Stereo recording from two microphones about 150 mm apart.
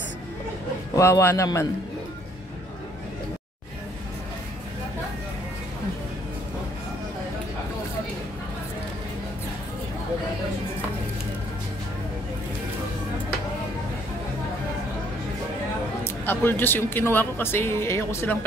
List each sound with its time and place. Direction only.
0.9 s a man's voice: 20° left (ahead or behind)
16.3 s speech: 15° left (ahead or behind)